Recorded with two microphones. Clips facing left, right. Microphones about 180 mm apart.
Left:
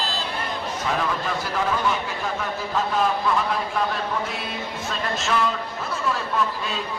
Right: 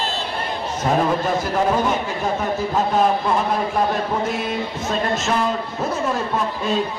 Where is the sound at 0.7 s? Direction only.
40° right (ahead or behind).